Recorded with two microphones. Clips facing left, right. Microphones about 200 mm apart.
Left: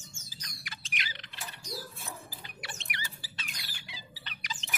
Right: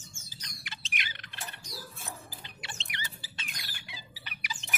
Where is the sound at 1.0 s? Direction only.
55° right (ahead or behind).